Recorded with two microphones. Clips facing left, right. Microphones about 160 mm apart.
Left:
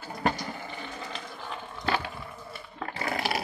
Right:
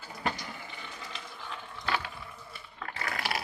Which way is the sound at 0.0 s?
50° left (ahead or behind).